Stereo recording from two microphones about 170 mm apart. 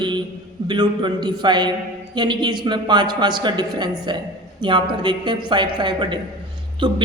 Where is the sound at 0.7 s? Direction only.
25° right (ahead or behind).